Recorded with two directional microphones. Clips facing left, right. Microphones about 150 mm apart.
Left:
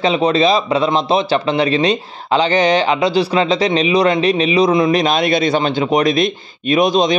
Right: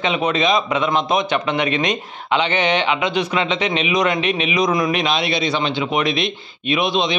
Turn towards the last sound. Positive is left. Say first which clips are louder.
# left 6 dB
turn(degrees=40)  # may be behind; listen again after turning